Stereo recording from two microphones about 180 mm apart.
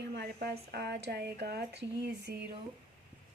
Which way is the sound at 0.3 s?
60° right (ahead or behind).